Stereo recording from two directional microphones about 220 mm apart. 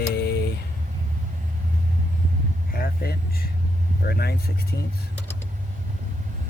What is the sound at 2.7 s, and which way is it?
Vehicle, 45° left (ahead or behind).